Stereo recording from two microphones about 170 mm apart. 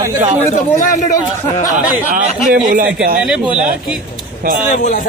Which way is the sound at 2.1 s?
55° right (ahead or behind).